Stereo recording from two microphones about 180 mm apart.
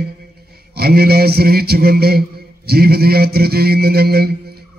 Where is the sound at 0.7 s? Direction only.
60° right (ahead or behind).